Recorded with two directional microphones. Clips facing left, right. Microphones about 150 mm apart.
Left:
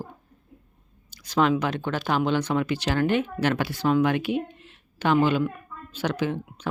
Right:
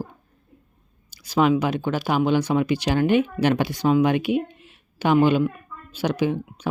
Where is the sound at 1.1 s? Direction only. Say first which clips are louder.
Right 3 dB; 10° right (ahead or behind).